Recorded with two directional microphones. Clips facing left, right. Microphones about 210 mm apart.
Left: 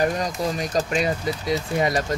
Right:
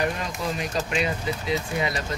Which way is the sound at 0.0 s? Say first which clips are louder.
Left 4 dB; 40° left (ahead or behind).